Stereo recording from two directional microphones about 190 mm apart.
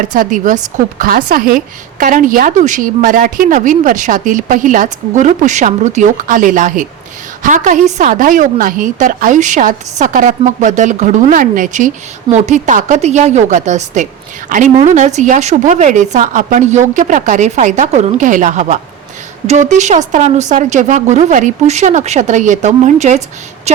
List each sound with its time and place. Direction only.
0.0 s a woman's voice: 45° right (ahead or behind)